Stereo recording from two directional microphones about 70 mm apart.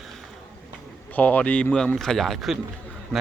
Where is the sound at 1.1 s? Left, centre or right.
Left.